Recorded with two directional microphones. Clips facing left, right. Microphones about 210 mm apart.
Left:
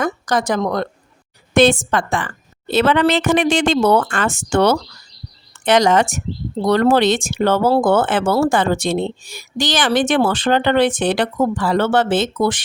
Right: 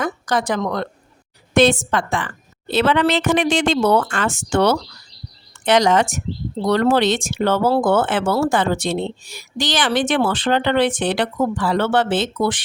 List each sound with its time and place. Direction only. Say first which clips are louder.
0.0 s speech: left 2 dB; 45° left (ahead or behind)